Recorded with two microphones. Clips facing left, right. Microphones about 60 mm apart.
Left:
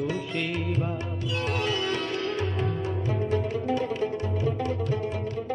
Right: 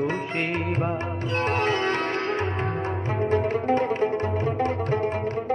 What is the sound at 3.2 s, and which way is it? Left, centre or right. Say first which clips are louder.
Music: right 7 dB; right.